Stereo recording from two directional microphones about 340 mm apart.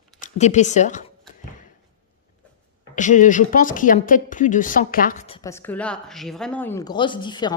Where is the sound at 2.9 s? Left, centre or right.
Left.